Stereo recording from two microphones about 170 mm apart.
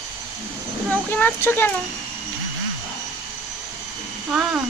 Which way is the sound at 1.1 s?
10° left (ahead or behind).